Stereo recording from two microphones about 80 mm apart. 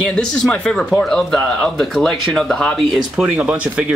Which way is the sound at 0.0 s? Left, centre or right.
Centre.